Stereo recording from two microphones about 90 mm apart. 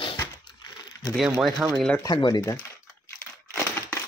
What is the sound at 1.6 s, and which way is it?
Speech, 20° right (ahead or behind).